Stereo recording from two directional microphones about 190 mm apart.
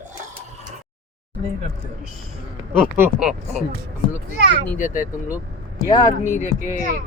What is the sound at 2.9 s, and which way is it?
Speech, 10° right (ahead or behind).